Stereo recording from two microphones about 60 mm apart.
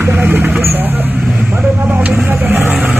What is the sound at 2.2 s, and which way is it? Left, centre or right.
Vehicle, right.